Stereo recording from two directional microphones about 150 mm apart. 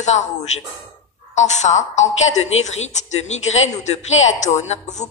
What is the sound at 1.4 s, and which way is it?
A woman's voice, 50° left (ahead or behind).